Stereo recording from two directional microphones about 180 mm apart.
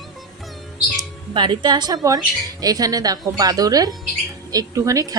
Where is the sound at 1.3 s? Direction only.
25° right (ahead or behind).